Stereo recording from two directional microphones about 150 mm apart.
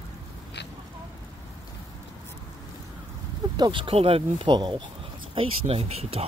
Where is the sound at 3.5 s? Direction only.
30° right (ahead or behind).